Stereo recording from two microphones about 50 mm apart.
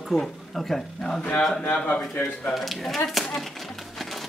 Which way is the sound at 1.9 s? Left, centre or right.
Left.